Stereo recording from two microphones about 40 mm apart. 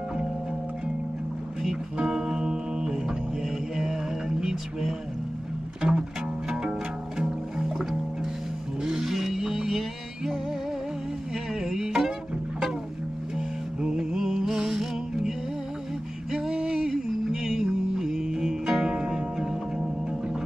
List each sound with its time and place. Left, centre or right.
2.0 s music: centre
7.2 s music: centre
11.6 s music: centre
13.7 s music: centre